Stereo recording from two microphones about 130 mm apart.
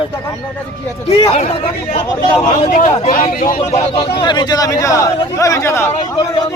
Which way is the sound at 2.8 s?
50° left (ahead or behind).